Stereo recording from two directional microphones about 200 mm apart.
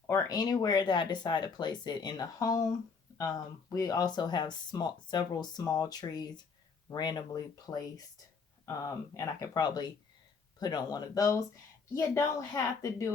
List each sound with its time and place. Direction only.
0.1 s speech: 20° left (ahead or behind)